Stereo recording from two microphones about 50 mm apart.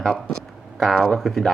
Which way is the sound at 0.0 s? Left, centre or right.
Centre.